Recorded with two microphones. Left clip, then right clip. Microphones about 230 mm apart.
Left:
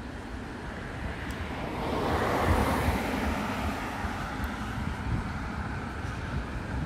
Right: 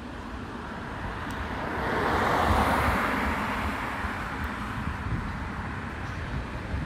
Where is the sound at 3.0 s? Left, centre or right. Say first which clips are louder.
Right 4 dB; centre.